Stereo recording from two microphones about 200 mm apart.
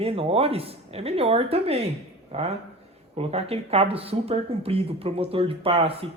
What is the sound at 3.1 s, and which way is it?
Speech, 30° right (ahead or behind).